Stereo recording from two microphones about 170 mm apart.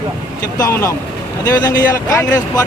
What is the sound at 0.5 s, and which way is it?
Speech, 20° left (ahead or behind).